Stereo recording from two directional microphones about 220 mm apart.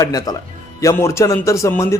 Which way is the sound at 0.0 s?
15° left (ahead or behind).